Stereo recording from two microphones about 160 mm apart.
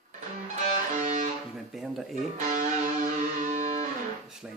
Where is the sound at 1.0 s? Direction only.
50° right (ahead or behind).